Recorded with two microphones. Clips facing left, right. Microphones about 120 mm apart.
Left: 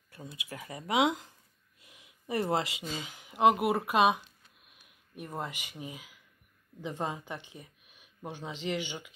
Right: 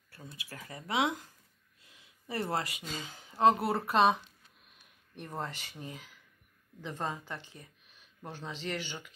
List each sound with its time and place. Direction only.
0.1 s speech: 20° left (ahead or behind)